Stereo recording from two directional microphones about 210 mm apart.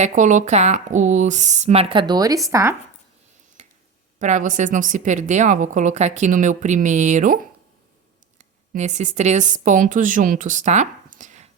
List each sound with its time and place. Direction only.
0.0 s a woman's voice: 35° right (ahead or behind); by 2.7 s 15° right (ahead or behind)
3.6 s a sound: 35° right (ahead or behind)
4.2 s a woman's voice: 35° right (ahead or behind)